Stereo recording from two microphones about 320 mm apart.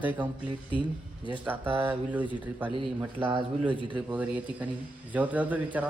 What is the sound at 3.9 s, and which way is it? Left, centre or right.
Speech, centre.